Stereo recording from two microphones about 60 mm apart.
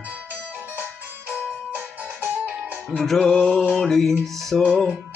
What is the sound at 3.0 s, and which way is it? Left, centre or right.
Music, centre.